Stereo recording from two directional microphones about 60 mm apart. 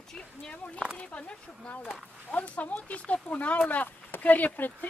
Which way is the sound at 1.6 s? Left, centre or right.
Left.